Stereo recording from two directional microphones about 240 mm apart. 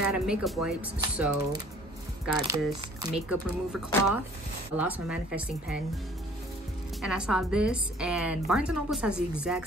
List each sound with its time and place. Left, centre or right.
0.0 s a woman's voice: centre
2.3 s speech: centre
3.3 s a woman's voice: centre
7.0 s a woman's voice: centre